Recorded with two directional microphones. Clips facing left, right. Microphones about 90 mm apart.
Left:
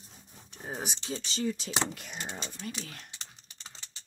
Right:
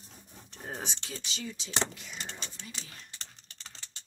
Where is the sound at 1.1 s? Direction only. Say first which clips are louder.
Left 8 dB; 35° left (ahead or behind); by 2.2 s 55° left (ahead or behind).